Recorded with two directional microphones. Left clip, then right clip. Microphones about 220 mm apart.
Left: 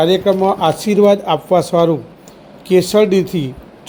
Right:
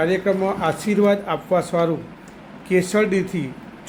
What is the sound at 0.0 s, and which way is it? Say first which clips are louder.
A man's voice: left 7 dB; 25° left (ahead or behind).